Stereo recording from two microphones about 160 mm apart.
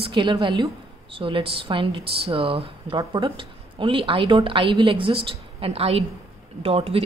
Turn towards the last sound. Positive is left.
turn(degrees=-35)  # may be behind; listen again after turning